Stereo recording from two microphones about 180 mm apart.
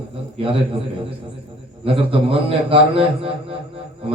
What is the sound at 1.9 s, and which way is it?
A man's voice, 30° right (ahead or behind).